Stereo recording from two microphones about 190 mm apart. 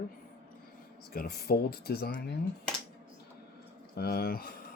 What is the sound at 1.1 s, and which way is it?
Speech, 55° left (ahead or behind).